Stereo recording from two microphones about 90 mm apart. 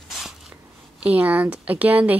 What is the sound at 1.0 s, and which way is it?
Speech, 20° right (ahead or behind).